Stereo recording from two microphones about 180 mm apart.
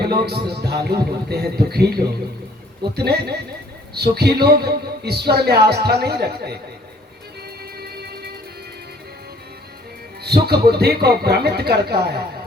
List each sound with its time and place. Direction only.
0.3 s a man's voice: 60° right (ahead or behind)
2.9 s a man's voice: 65° right (ahead or behind)
10.2 s a man's voice: 65° right (ahead or behind)